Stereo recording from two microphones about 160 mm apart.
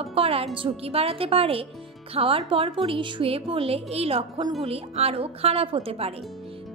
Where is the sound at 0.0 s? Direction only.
35° right (ahead or behind).